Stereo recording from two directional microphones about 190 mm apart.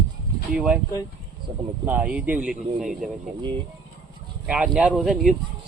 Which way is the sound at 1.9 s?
10° right (ahead or behind).